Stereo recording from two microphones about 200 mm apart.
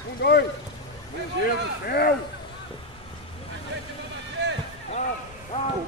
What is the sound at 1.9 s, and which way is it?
Speech, 50° left (ahead or behind).